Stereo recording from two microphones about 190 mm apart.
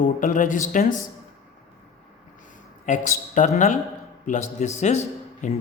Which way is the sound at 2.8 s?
40° left (ahead or behind).